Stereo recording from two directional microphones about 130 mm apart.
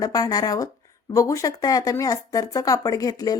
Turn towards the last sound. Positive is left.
turn(degrees=30)  # may be behind; listen again after turning